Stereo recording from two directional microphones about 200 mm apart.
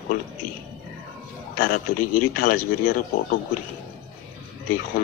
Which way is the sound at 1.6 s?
45° left (ahead or behind).